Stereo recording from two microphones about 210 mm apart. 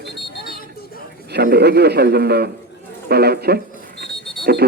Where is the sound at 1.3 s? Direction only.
50° right (ahead or behind).